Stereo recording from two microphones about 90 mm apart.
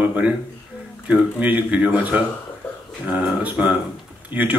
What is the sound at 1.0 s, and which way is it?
Speech, 15° right (ahead or behind).